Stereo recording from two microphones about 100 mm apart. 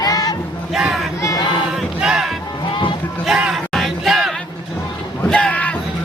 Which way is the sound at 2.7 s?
55° left (ahead or behind).